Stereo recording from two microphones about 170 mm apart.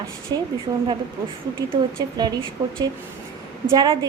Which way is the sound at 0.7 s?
25° right (ahead or behind).